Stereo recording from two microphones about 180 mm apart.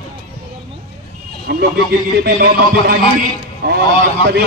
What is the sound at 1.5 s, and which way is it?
A man's voice, 65° right (ahead or behind).